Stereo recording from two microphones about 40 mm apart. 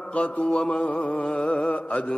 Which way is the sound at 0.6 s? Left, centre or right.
Left.